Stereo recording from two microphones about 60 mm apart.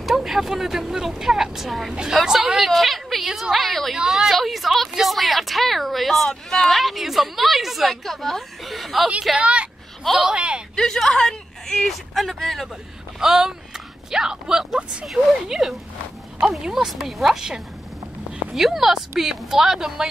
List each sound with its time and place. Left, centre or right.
0.0 s a woman's voice: centre
3.9 s a woman's voice: centre
6.8 s a woman's voice: centre
9.4 s a woman's voice: centre
10.8 s a woman's voice: centre
13.2 s a woman's voice: centre